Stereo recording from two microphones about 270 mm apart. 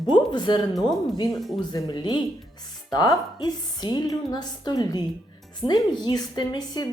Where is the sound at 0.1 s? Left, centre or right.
Centre.